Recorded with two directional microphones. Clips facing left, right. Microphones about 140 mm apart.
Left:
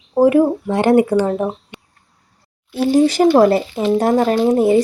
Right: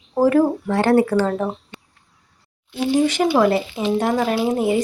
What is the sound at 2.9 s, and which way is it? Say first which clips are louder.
Speech: left 5 dB; 35° left (ahead or behind).